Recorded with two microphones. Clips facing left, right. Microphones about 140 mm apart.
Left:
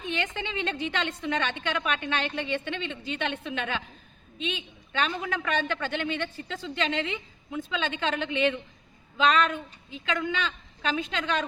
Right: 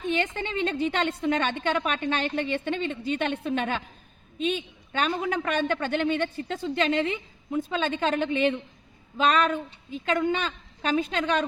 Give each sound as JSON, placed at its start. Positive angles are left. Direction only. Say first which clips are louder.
{"t": 0.1, "sound": "a man's voice", "louder": "right 4 dB", "side_deg": -45}